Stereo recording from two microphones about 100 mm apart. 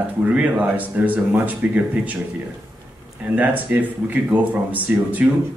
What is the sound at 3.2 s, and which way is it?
Speech, 15° right (ahead or behind).